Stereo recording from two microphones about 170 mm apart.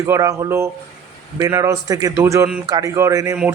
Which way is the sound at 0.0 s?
20° right (ahead or behind).